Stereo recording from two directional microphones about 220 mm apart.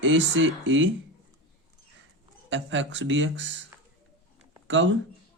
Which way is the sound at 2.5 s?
55° right (ahead or behind).